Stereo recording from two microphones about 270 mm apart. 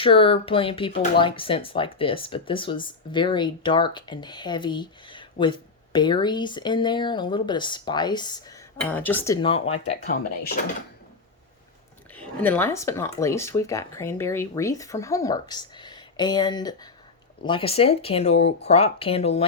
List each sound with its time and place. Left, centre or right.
0.0 s speech: centre
12.1 s speech: centre; by 19.5 s left